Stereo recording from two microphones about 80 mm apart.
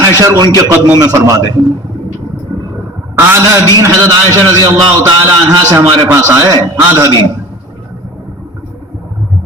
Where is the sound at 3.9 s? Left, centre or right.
Right.